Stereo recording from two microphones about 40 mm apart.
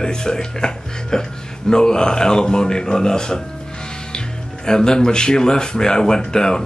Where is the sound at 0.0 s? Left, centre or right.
Centre.